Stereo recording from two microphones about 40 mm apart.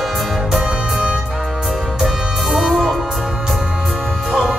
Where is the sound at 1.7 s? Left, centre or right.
Centre.